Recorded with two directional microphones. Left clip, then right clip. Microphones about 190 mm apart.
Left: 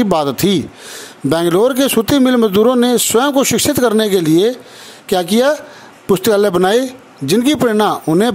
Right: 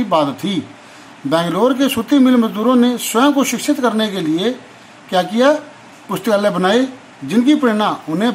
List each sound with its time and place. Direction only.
0.0 s speech: 55° left (ahead or behind)